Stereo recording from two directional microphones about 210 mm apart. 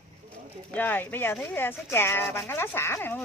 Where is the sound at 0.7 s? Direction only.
10° left (ahead or behind).